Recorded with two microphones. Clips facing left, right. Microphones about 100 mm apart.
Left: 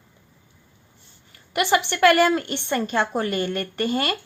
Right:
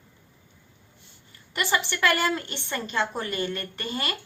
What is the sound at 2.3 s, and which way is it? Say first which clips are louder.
Speech: left 7 dB; 45° left (ahead or behind).